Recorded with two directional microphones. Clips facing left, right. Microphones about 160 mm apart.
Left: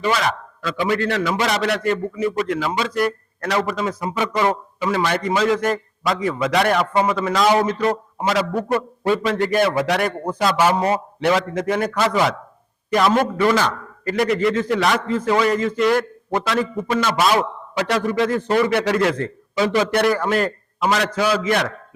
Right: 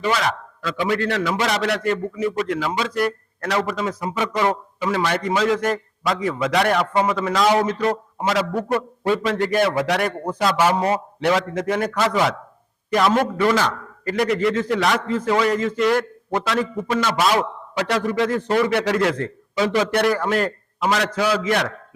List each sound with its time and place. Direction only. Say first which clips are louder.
0.0 s a man's voice: left 1 dB; 10° left (ahead or behind)